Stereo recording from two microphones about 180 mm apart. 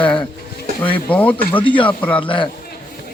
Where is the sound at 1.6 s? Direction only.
25° left (ahead or behind).